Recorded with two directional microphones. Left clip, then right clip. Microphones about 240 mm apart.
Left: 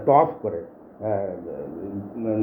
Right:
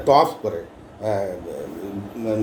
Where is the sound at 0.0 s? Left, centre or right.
Centre.